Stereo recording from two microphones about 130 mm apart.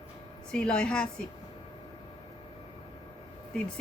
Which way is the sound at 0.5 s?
5° left (ahead or behind).